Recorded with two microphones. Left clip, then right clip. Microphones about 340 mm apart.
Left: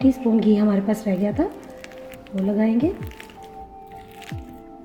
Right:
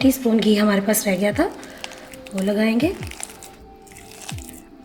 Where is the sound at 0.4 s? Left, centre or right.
Right.